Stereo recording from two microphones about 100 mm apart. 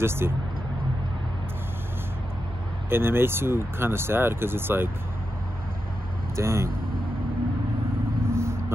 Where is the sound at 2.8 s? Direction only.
25° right (ahead or behind).